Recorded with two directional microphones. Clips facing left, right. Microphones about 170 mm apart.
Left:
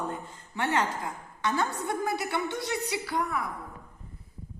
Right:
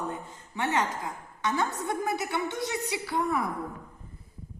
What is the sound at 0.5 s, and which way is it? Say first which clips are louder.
Speech: even; 15° right (ahead or behind).